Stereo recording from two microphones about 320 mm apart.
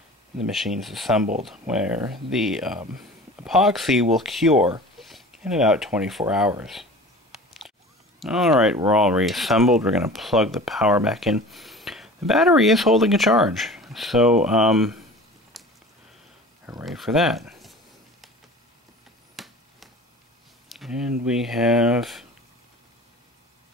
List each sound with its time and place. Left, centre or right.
0.4 s speech: centre
8.2 s speech: centre
15.5 s a sound: centre
16.6 s speech: centre
19.3 s a sound: centre
21.3 s speech: centre